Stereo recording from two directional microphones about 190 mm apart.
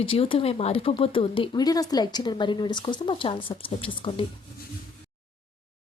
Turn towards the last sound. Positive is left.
turn(degrees=25)  # may be behind; listen again after turning